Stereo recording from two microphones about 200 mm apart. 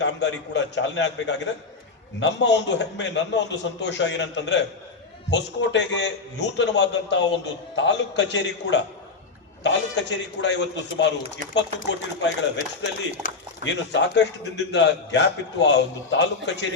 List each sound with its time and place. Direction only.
0.0 s a man's voice: 60° left (ahead or behind)
13.2 s speech: 40° left (ahead or behind)
13.7 s a man's voice: 60° left (ahead or behind)